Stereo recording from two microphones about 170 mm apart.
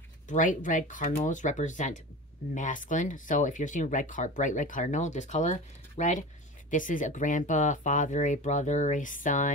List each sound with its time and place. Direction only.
0.3 s speech: 50° left (ahead or behind)